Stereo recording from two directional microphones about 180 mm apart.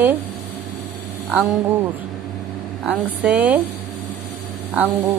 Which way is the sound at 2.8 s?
10° right (ahead or behind).